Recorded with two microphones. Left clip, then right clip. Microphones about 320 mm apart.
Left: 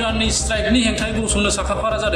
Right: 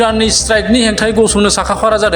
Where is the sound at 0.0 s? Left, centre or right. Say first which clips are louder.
Right 9 dB; right.